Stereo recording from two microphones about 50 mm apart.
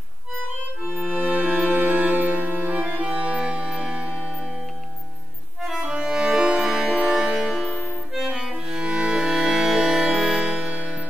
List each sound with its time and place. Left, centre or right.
0.8 s music: right
5.6 s music: centre
8.1 s accordion: centre
8.6 s music: centre
10.5 s music: right